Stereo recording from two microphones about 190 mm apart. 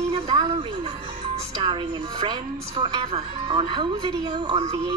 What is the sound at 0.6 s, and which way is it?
Music, 30° right (ahead or behind).